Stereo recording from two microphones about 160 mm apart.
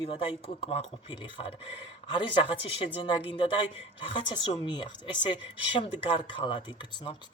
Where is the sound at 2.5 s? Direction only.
35° left (ahead or behind).